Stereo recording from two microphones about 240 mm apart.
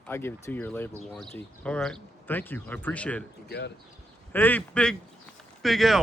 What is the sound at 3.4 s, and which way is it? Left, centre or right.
Speech, left.